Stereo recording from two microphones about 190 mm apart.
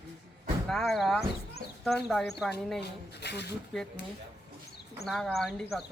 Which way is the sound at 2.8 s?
60° left (ahead or behind).